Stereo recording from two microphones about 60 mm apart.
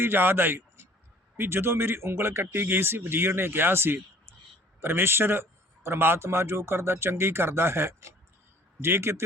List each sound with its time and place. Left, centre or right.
0.0 s speech: right